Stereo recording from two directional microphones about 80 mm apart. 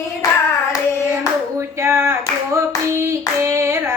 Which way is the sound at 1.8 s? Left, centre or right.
Right.